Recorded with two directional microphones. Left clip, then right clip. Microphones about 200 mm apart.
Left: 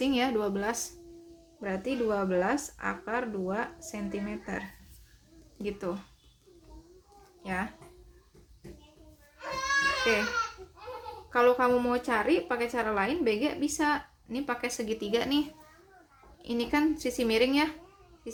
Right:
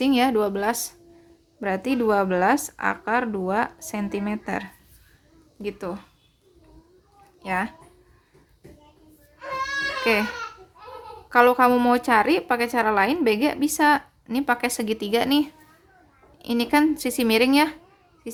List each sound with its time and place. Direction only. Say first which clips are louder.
0.0 s a woman's voice: right 8 dB; 30° right (ahead or behind)
5.6 s a woman's voice: right 4 dB; 30° right (ahead or behind)
7.4 s speech: right 8 dB; 35° right (ahead or behind)
10.0 s speech: right 5 dB; 35° right (ahead or behind)
11.3 s a woman's voice: right 7 dB; 40° right (ahead or behind)